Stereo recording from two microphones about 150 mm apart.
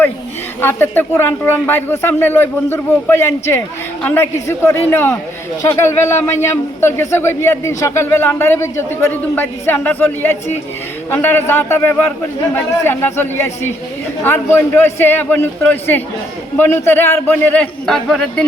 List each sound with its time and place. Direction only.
0.6 s a man's voice: 15° left (ahead or behind)